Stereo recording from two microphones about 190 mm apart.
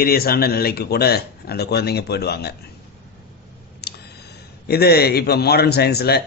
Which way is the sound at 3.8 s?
55° left (ahead or behind).